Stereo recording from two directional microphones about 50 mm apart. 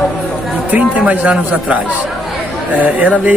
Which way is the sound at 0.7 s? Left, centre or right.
Right.